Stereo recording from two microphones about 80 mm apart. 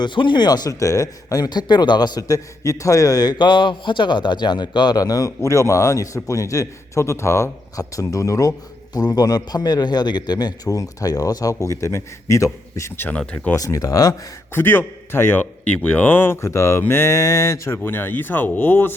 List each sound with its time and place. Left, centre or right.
0.0 s speech: left
5.4 s a man's voice: left
13.0 s speech: left
13.6 s a man's voice: left
14.5 s speech: left
17.8 s speech: left